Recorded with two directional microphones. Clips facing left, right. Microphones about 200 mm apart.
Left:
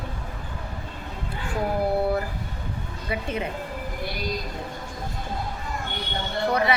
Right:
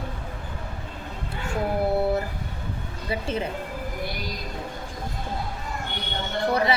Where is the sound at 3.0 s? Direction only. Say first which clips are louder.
Right 1 dB; 30° right (ahead or behind).